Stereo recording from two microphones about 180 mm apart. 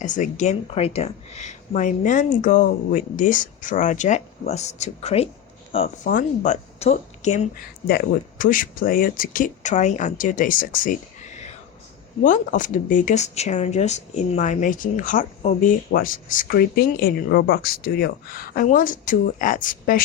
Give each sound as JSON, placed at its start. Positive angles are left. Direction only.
{"t": 0.0, "sound": "speech", "side_deg": 45}
{"t": 6.1, "sound": "a woman's voice", "side_deg": 45}
{"t": 7.9, "sound": "speech", "side_deg": 55}